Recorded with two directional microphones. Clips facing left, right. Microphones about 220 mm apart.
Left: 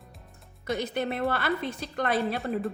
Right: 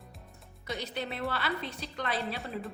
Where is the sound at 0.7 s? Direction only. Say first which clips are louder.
Left 7 dB; 50° left (ahead or behind).